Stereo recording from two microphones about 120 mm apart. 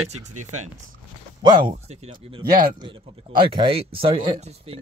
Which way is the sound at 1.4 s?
40° right (ahead or behind).